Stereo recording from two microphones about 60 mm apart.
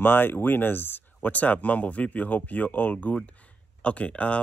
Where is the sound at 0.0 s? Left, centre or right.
Left.